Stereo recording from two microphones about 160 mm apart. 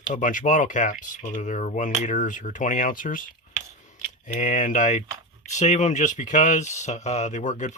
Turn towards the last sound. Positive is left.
turn(degrees=50)  # may be behind; listen again after turning